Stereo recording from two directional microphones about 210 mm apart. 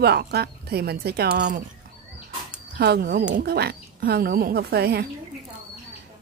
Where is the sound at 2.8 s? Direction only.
45° right (ahead or behind).